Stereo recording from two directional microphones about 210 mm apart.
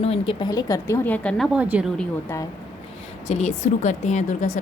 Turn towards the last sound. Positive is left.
turn(degrees=35)  # may be behind; listen again after turning